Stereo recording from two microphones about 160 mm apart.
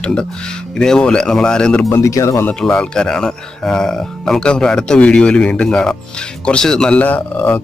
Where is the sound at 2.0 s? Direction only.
20° left (ahead or behind).